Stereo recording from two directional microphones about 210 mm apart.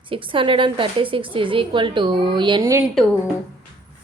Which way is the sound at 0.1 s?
25° right (ahead or behind).